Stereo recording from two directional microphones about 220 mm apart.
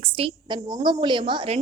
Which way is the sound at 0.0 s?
20° right (ahead or behind).